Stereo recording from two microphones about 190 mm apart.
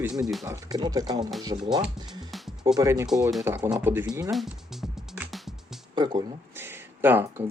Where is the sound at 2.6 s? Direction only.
15° right (ahead or behind); by 5.4 s centre (ahead or behind).